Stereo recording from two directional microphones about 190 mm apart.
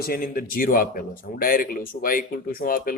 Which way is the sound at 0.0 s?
50° left (ahead or behind).